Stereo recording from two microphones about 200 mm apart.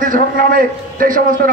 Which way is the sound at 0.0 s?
45° right (ahead or behind).